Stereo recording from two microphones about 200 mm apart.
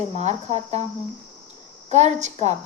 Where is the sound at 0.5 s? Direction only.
20° left (ahead or behind).